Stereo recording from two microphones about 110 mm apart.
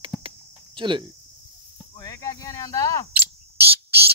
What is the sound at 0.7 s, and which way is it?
Speech, 45° right (ahead or behind).